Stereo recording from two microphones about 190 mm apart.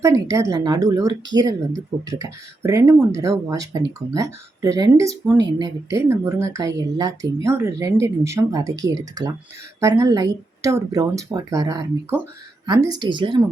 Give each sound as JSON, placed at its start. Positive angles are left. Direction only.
{"t": 0.0, "sound": "speech", "side_deg": -15}